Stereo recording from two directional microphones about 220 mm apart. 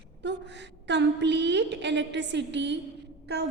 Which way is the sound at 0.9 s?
50° right (ahead or behind).